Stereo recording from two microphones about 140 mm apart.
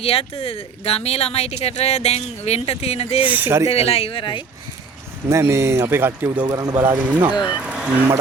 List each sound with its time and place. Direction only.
0.0 s speech: 45° left (ahead or behind)
3.2 s speech: 15° right (ahead or behind)
3.7 s speech: 45° left (ahead or behind)
5.3 s speech: 20° right (ahead or behind)
6.4 s speech: 25° right (ahead or behind)
7.1 s speech: 10° right (ahead or behind)